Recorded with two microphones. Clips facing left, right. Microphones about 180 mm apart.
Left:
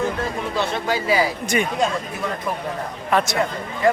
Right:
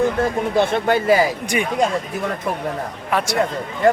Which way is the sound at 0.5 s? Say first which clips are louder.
Right 6 dB; 55° right (ahead or behind).